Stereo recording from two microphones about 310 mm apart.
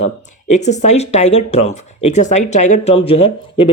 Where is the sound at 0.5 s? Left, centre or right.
Left.